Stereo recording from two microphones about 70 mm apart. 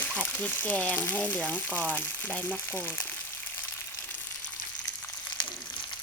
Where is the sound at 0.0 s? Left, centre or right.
Left.